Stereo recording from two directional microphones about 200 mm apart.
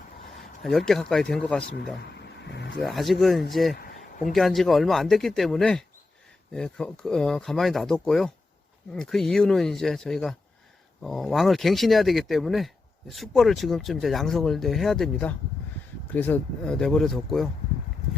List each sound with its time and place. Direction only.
0.6 s speech: centre (ahead or behind)
2.1 s vehicle: 60° left (ahead or behind)
2.8 s speech: centre (ahead or behind)
3.8 s a sound: 45° left (ahead or behind)
4.3 s speech: centre (ahead or behind)